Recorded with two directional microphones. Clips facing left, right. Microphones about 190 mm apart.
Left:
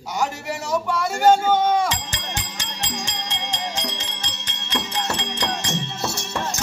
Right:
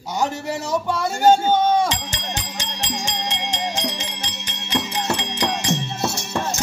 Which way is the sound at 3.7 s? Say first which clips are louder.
Right 3 dB; 10° right (ahead or behind).